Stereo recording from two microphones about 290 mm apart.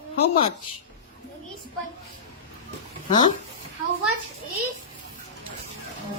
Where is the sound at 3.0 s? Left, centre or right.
Centre.